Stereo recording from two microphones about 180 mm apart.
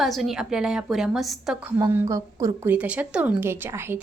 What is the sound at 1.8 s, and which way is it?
A woman's voice, 15° right (ahead or behind).